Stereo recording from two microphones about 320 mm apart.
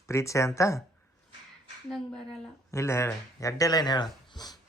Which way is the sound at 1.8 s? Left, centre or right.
Centre.